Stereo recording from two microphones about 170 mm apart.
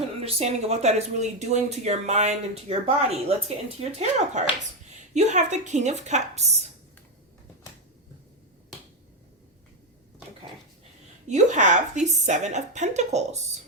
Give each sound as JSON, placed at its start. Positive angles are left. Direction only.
{"t": 0.2, "sound": "a woman's voice", "side_deg": -40}
{"t": 11.3, "sound": "a woman's voice", "side_deg": -45}